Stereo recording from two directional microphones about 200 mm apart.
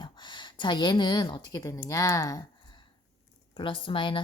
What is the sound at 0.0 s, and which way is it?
A woman's voice, 25° left (ahead or behind).